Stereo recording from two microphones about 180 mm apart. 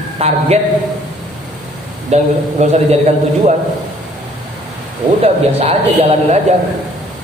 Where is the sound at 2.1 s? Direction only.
40° right (ahead or behind).